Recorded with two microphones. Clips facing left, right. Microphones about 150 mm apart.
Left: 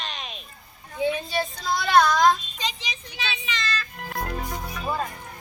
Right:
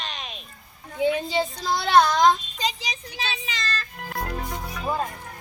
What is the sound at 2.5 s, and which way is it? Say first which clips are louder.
Child singing: right 3 dB; 40° right (ahead or behind).